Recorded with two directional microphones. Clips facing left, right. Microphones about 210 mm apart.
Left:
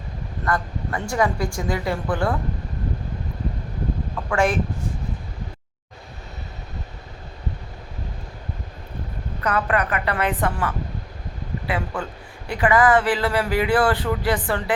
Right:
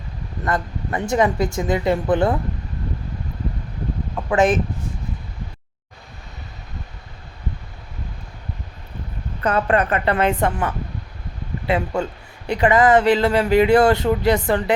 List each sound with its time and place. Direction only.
0.4 s speech: 20° right (ahead or behind)
4.3 s speech: 20° right (ahead or behind)
9.4 s speech: 30° right (ahead or behind)
11.7 s speech: 25° right (ahead or behind)